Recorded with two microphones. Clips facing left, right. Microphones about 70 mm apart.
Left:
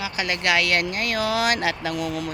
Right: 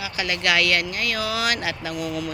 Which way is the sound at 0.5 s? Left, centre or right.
Left.